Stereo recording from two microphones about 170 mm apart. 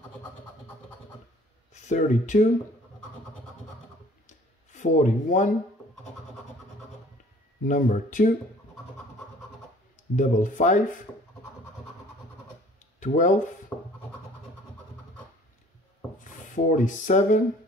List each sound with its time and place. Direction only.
1.7 s speech: 45° left (ahead or behind)
4.3 s a sound: 45° left (ahead or behind)
7.6 s speech: 50° left (ahead or behind)
10.1 s speech: 45° left (ahead or behind)
12.7 s a sound: 45° left (ahead or behind)
13.7 s scratch: 10° left (ahead or behind)
16.3 s speech: 50° left (ahead or behind)